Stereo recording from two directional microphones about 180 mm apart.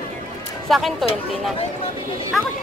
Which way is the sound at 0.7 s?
Centre (ahead or behind).